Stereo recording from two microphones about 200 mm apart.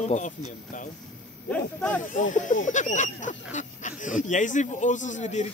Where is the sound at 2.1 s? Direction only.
40° left (ahead or behind).